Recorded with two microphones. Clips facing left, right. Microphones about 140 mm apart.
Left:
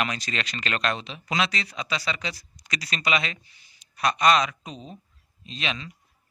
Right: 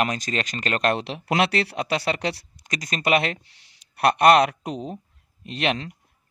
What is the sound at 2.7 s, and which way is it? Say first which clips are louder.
Speech: right 5 dB; 45° right (ahead or behind).